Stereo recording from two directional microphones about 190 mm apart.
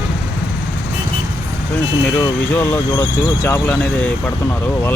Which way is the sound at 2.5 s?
10° left (ahead or behind).